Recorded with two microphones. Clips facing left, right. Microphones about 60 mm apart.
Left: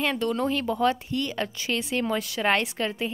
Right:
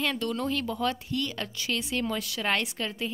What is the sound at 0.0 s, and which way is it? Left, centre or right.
A woman's voice, left.